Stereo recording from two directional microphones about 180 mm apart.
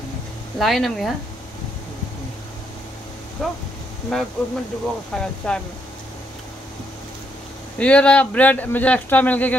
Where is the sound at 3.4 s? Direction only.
Centre (ahead or behind).